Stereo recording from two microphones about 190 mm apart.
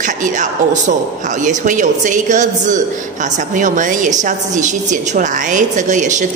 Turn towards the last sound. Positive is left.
turn(degrees=-40)  # may be behind; listen again after turning